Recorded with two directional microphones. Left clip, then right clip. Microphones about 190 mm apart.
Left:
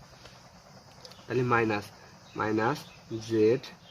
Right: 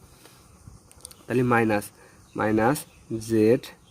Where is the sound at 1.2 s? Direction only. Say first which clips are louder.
Right 4 dB; 55° right (ahead or behind).